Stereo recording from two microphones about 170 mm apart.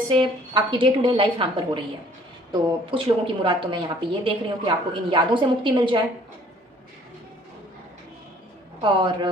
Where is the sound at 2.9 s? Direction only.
30° right (ahead or behind).